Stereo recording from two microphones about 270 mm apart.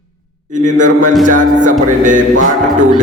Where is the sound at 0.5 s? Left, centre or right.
Right.